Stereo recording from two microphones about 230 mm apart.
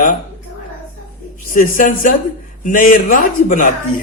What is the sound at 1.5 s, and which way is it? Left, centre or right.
A man's voice, left.